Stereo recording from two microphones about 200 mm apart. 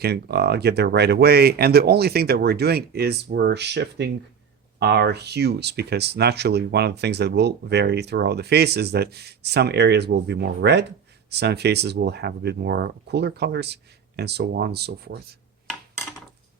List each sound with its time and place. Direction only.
0.0 s speech: 55° right (ahead or behind)